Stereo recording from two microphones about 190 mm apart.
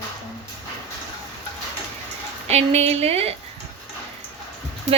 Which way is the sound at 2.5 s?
35° right (ahead or behind).